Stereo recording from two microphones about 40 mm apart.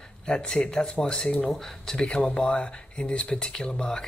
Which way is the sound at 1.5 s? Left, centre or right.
Centre.